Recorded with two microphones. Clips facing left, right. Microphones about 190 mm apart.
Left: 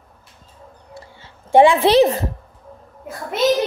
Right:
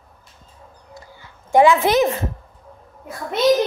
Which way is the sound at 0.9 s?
30° left (ahead or behind).